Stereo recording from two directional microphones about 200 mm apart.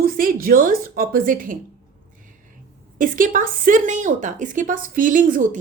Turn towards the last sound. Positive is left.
turn(degrees=-40)  # may be behind; listen again after turning